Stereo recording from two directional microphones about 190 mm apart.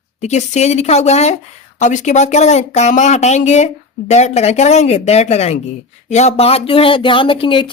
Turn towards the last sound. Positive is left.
turn(degrees=25)  # may be behind; listen again after turning